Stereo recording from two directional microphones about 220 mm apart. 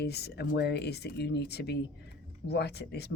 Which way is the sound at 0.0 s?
45° left (ahead or behind).